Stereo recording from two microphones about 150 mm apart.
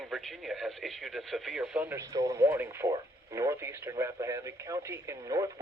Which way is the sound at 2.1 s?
25° right (ahead or behind).